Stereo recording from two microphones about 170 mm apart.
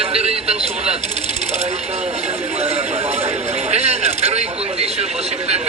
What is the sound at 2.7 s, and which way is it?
Speech, 35° right (ahead or behind).